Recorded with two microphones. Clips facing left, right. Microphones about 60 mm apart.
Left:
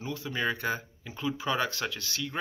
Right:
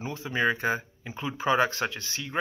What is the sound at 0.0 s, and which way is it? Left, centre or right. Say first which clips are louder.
Speech: right 4 dB; right.